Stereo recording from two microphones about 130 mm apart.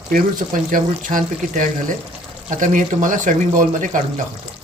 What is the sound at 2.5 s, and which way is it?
Speech, 80° right.